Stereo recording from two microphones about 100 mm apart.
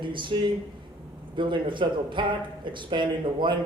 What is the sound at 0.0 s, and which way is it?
A man's voice, 55° right (ahead or behind).